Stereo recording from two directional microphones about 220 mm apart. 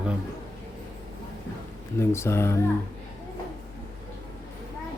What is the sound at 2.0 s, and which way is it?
Speech, 10° left (ahead or behind).